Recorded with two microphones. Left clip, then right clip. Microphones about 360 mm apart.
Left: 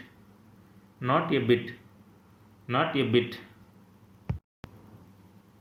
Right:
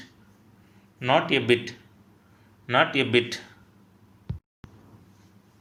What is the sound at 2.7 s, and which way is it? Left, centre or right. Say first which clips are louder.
Speech: right 5 dB; right.